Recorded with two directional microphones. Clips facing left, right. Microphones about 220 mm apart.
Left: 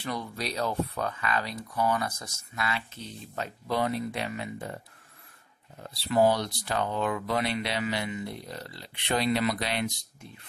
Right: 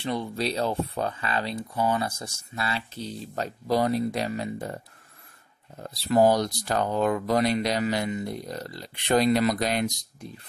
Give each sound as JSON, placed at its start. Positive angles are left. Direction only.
{"t": 0.0, "sound": "speech", "side_deg": -25}
{"t": 5.8, "sound": "speech", "side_deg": -45}